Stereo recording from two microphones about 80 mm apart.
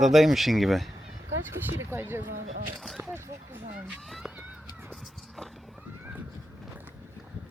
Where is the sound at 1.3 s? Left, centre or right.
Right.